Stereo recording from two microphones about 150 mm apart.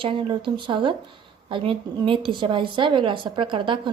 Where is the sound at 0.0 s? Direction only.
35° right (ahead or behind).